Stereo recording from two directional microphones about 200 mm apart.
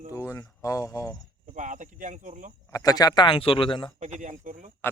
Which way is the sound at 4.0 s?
35° right (ahead or behind).